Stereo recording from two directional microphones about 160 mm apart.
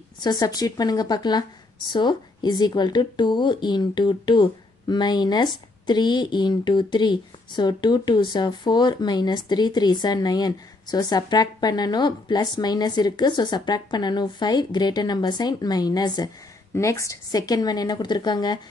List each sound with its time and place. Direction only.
0.2 s a woman's voice: 25° left (ahead or behind)